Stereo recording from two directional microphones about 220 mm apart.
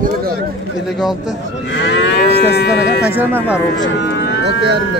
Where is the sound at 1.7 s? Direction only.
55° left (ahead or behind).